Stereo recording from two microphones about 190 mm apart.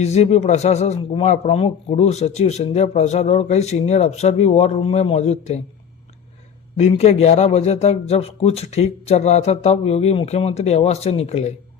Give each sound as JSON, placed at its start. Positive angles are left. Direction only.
{"t": 0.0, "sound": "speech", "side_deg": 35}
{"t": 6.7, "sound": "speech", "side_deg": 35}